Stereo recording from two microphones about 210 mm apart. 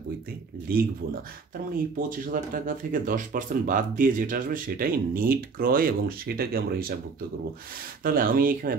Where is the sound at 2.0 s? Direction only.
40° right (ahead or behind).